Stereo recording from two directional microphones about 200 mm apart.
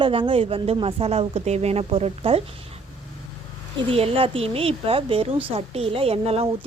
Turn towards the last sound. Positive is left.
turn(degrees=-30)  # may be behind; listen again after turning